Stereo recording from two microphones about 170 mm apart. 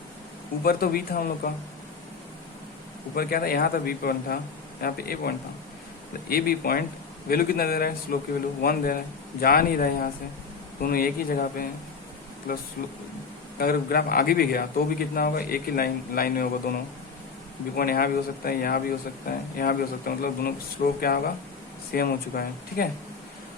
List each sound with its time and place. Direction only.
0.6 s speech: 60° left (ahead or behind)
3.2 s speech: 60° left (ahead or behind)